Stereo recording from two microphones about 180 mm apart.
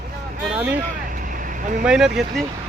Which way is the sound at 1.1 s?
50° right (ahead or behind).